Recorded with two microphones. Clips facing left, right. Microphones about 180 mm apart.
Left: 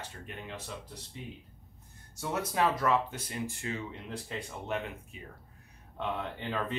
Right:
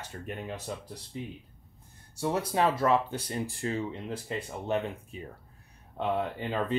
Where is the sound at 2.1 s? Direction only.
30° right (ahead or behind).